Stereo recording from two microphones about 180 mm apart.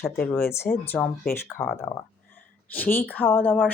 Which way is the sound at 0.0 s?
10° left (ahead or behind).